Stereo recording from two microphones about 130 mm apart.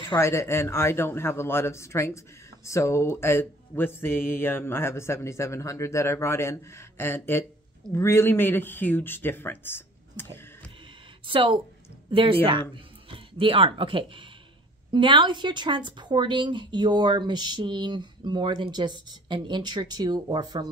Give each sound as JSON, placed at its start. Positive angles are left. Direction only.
{"t": 0.1, "sound": "speech", "side_deg": 20}
{"t": 11.2, "sound": "speech", "side_deg": -40}